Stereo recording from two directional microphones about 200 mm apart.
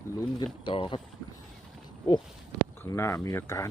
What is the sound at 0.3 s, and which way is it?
Speech, 25° left (ahead or behind).